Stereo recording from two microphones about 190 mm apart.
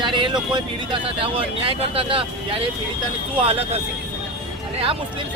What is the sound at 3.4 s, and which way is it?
Speech, 30° right (ahead or behind).